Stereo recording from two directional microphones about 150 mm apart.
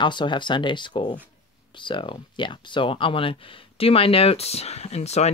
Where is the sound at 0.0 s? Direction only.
30° left (ahead or behind).